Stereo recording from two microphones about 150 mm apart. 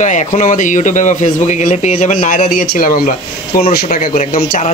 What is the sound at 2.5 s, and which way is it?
Speech, 80° left.